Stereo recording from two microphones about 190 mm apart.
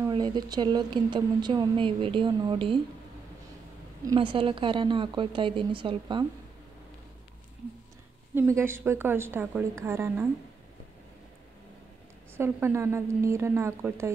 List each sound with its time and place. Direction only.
0.1 s a woman's voice: 20° right (ahead or behind)
4.0 s a woman's voice: 25° right (ahead or behind)
8.4 s a woman's voice: 15° right (ahead or behind)
12.4 s a woman's voice: 10° right (ahead or behind)